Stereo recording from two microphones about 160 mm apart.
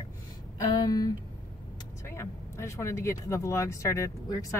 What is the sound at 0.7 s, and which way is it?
A woman's voice, 25° left (ahead or behind).